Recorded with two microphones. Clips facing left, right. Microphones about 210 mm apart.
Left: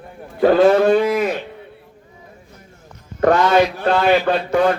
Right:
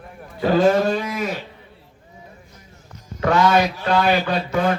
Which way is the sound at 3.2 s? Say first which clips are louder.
Left 3 dB; 50° left (ahead or behind).